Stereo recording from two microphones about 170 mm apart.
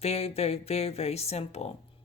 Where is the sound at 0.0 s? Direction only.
35° left (ahead or behind).